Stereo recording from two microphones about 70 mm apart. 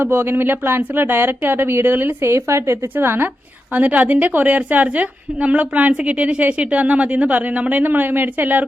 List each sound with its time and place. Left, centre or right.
0.0 s speech: right
2.9 s a woman's voice: right